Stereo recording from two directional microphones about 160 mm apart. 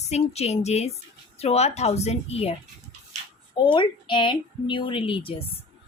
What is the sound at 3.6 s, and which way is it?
A woman's voice, 30° left (ahead or behind).